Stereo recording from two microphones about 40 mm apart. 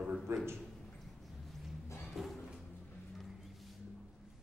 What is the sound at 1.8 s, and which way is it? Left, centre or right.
Music, left.